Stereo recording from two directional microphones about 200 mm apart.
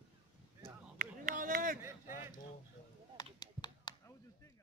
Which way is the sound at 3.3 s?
20° left (ahead or behind).